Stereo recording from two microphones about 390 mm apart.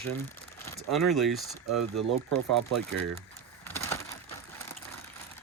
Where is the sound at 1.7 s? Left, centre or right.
Centre.